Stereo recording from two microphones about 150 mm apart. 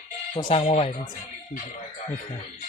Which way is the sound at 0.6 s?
50° left (ahead or behind).